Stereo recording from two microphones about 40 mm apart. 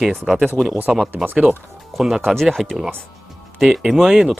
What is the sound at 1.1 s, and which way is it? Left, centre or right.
Speech, right.